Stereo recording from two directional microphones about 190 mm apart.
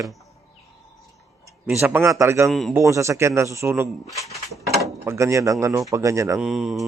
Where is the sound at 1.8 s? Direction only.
10° right (ahead or behind).